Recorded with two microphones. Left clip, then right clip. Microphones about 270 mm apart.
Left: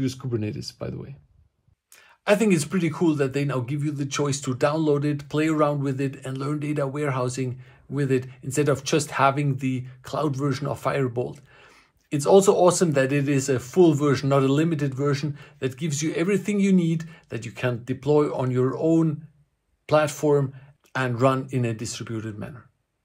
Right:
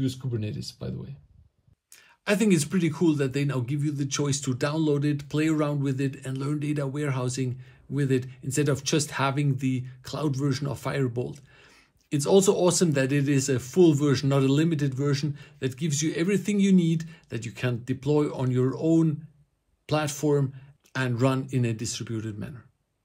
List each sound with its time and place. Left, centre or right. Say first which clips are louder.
0.0 s speech: left 4 dB; centre
2.2 s speech: left 4 dB; centre
11.6 s a sound: left 3 dB; centre
12.4 s speech: left 4 dB; centre